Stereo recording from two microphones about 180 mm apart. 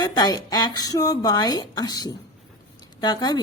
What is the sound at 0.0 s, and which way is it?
A woman's voice, 20° left (ahead or behind).